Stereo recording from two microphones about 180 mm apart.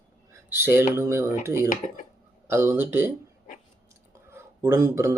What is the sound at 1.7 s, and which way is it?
Speech, 50° left (ahead or behind).